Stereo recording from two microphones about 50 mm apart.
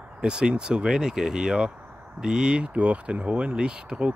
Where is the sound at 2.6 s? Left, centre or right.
Right.